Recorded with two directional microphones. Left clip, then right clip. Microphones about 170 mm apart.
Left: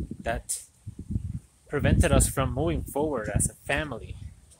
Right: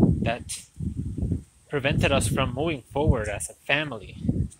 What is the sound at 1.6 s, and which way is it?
Speech, 15° left (ahead or behind).